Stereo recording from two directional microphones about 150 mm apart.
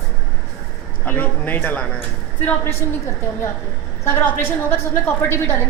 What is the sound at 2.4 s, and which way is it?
Speech, 15° left (ahead or behind).